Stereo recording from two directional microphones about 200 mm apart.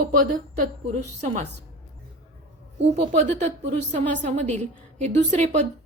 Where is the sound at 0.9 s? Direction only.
35° right (ahead or behind).